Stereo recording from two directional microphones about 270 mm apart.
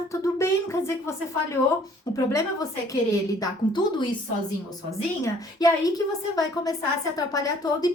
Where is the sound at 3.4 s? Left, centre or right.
Centre.